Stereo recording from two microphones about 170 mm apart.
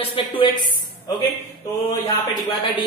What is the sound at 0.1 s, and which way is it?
Speech, 30° left (ahead or behind).